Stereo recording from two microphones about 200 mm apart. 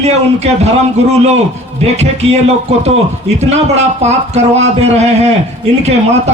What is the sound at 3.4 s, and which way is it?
Speech, 35° right (ahead or behind).